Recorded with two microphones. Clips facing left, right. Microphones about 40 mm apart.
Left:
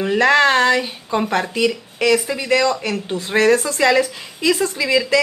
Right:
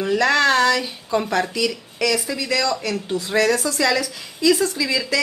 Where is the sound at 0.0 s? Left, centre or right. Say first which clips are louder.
Left 3 dB; left.